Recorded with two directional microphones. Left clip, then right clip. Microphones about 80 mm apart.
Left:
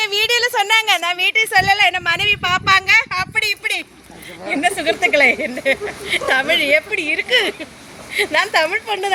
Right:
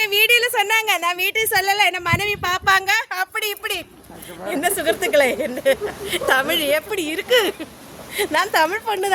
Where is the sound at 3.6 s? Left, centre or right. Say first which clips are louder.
Left 4 dB; right.